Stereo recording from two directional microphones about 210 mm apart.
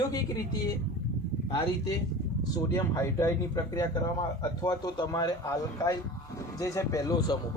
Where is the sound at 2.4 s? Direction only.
15° left (ahead or behind).